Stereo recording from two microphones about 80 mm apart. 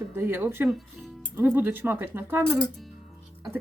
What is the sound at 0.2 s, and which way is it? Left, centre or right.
Speech, right.